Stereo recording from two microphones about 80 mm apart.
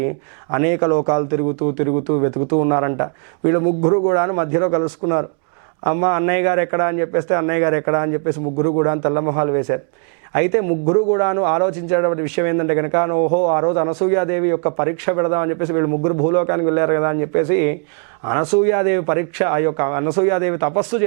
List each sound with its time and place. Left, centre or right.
0.5 s a man's voice: centre